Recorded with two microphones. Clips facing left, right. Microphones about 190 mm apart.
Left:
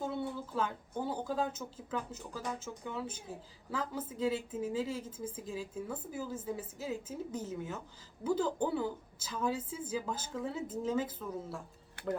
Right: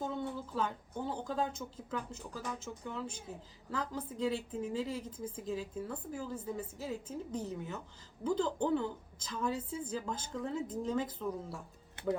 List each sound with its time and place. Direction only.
0.0 s speech: centre (ahead or behind)